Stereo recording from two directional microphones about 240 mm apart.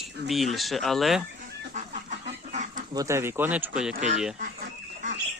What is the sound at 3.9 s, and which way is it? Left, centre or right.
Speech, right.